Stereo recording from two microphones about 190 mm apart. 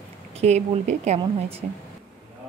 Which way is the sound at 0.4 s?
35° right (ahead or behind).